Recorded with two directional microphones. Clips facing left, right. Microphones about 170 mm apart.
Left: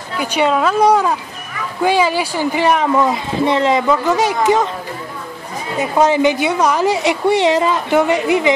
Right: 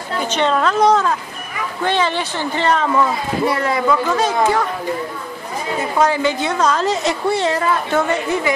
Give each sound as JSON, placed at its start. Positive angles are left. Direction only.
{"t": 0.2, "sound": "speech", "side_deg": 10}
{"t": 5.8, "sound": "speech", "side_deg": 20}